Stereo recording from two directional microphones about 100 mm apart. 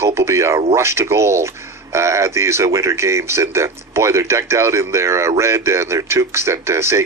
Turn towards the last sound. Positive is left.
turn(degrees=-25)  # may be behind; listen again after turning